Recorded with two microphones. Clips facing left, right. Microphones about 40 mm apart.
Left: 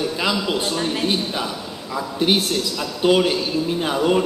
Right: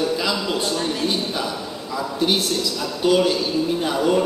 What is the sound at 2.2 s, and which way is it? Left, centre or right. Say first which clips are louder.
A man's voice: left 2 dB; left.